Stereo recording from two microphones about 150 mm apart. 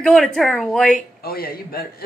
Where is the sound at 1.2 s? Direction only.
80° left.